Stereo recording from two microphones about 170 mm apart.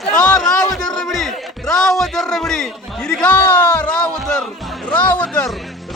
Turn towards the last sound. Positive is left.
turn(degrees=5)  # may be behind; listen again after turning